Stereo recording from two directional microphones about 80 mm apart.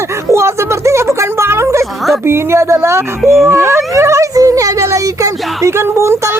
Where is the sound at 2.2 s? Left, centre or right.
Right.